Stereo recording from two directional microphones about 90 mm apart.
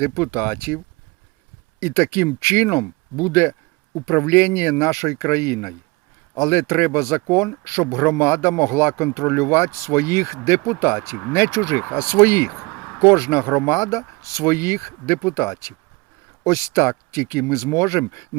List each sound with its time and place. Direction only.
0.0 s speech: 30° left (ahead or behind)
1.8 s speech: 30° left (ahead or behind)
12.6 s a sound: 5° left (ahead or behind)
13.0 s speech: 30° left (ahead or behind)